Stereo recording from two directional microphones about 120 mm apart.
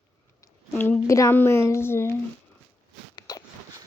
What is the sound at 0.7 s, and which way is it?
A woman's voice, 15° left (ahead or behind).